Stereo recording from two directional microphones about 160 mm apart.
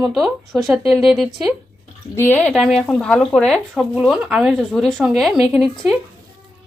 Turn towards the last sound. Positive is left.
turn(degrees=0)  # may be behind; listen again after turning